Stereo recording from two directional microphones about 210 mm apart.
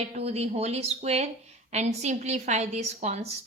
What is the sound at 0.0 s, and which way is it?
A woman's voice, 30° right (ahead or behind).